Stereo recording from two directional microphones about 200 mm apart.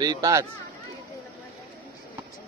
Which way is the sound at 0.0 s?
20° right (ahead or behind).